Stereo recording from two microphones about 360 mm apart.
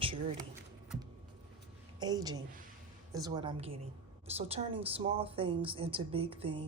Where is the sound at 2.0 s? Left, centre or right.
Centre.